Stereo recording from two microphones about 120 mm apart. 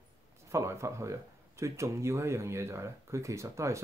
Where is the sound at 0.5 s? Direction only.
25° right (ahead or behind).